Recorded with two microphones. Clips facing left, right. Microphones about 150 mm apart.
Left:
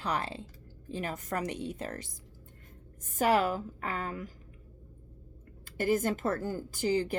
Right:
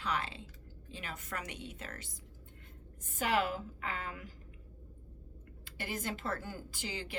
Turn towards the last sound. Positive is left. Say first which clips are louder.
# left 13 dB
turn(degrees=40)  # may be behind; listen again after turning